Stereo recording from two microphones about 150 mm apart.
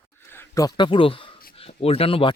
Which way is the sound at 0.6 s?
30° left (ahead or behind).